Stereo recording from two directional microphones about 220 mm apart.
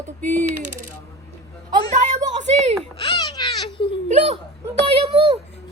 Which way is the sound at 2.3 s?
30° right (ahead or behind).